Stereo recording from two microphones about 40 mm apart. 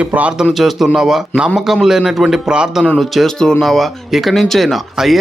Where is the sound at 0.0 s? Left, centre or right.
Right.